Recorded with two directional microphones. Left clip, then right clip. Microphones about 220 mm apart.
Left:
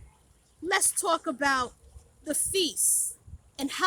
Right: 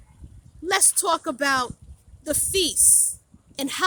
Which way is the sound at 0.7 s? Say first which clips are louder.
Right 4 dB; 40° right (ahead or behind).